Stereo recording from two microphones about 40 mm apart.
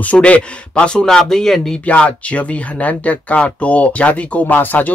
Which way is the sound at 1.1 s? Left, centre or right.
Centre.